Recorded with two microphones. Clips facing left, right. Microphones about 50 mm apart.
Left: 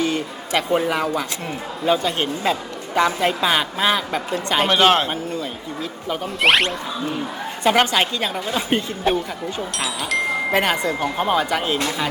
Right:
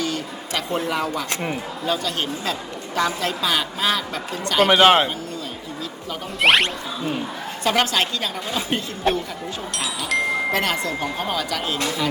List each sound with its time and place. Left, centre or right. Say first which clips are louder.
0.0 s a sound: left 4 dB; left
1.8 s a man's voice: left 6 dB; left
4.7 s speech: right 2 dB; centre
5.0 s speech: left 3 dB; left
6.4 s speech: even; centre
7.6 s a woman's voice: left 3 dB; centre
9.1 s speech: left 1 dB; centre
10.5 s a woman's voice: left 3 dB; centre